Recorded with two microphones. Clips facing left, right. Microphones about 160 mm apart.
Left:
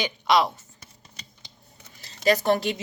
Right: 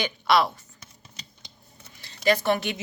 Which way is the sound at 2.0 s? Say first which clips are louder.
Left 1 dB; 40° left (ahead or behind).